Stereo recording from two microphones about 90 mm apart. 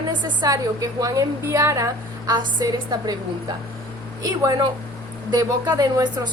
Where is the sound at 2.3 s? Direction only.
50° right (ahead or behind).